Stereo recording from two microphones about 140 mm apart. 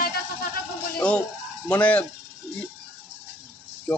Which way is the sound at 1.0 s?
10° left (ahead or behind).